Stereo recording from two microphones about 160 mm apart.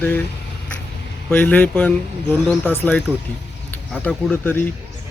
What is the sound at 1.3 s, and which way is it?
Speech, 10° left (ahead or behind).